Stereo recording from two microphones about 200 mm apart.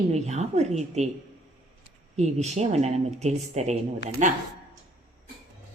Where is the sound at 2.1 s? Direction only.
35° right (ahead or behind).